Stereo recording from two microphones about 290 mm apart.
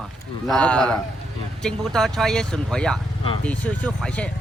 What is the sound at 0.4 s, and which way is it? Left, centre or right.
Speech, centre.